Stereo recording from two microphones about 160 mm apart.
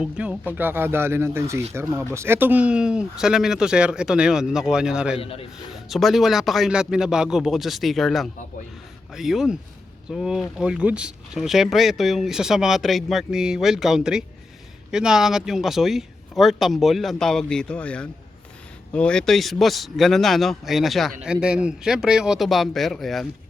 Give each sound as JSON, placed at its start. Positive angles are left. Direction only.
{"t": 0.0, "sound": "speech", "side_deg": -10}
{"t": 5.2, "sound": "a man's voice", "side_deg": 35}
{"t": 5.9, "sound": "speech", "side_deg": 0}